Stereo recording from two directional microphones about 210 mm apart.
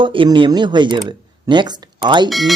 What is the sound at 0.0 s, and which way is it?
Speech, 25° right (ahead or behind).